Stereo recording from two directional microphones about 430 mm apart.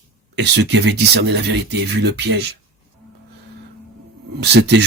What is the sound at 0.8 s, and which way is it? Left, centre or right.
Speech, right.